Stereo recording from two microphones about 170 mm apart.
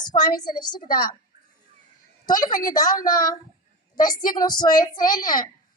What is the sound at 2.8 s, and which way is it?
Speech, 55° left (ahead or behind).